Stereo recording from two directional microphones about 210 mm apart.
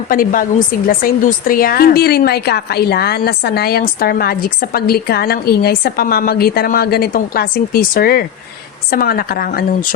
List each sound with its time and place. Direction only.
0.1 s a woman's voice: 40° left (ahead or behind)